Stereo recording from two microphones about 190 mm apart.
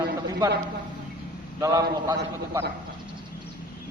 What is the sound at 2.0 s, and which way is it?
Speech, 15° right (ahead or behind).